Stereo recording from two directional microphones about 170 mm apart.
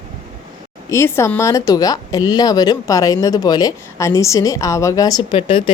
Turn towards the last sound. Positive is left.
turn(degrees=30)  # may be behind; listen again after turning